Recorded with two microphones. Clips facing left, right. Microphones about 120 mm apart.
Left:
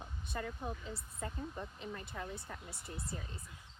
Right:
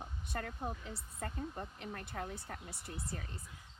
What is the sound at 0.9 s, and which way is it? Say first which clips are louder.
Speech: even; 65° right (ahead or behind).